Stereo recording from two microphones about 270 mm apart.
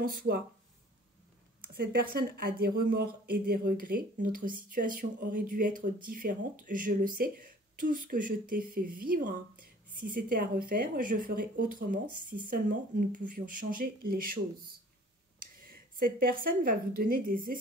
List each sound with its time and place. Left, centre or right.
0.0 s speech: right
2.1 s speech: right
3.4 s speech: right
16.2 s speech: right